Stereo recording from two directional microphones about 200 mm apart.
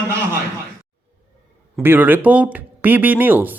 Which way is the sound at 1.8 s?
10° right (ahead or behind).